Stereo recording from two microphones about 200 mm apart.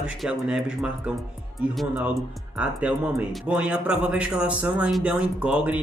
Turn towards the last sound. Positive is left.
turn(degrees=-5)  # may be behind; listen again after turning